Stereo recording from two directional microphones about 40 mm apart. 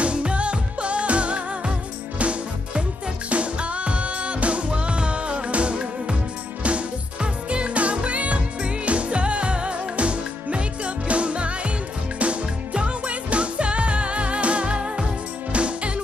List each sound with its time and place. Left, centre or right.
0.0 s music: right